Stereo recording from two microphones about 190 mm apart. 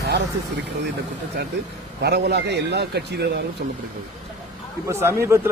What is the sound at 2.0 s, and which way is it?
Speech, 60° right (ahead or behind).